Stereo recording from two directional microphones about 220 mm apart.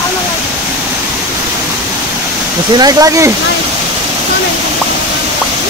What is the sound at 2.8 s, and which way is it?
Speech, 15° right (ahead or behind).